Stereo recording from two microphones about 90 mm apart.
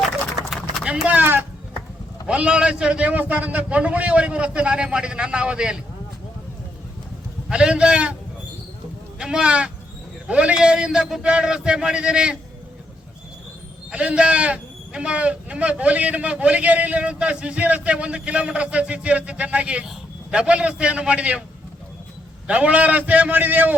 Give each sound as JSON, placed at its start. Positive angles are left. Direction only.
{"t": 1.0, "sound": "a man's voice", "side_deg": -20}
{"t": 7.5, "sound": "a man's voice", "side_deg": -10}
{"t": 9.1, "sound": "a man's voice", "side_deg": -10}
{"t": 13.9, "sound": "a man's voice", "side_deg": -10}
{"t": 22.4, "sound": "a man's voice", "side_deg": -15}